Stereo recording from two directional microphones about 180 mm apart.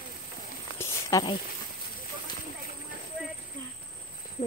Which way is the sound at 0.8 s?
20° left (ahead or behind).